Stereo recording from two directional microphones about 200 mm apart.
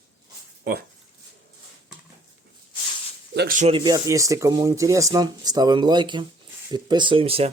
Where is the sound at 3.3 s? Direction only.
45° right (ahead or behind).